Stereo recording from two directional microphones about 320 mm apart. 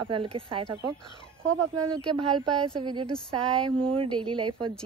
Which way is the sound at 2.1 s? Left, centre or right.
Centre.